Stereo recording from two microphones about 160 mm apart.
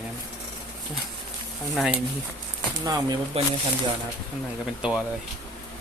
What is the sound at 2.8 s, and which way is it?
Speech, 25° right (ahead or behind).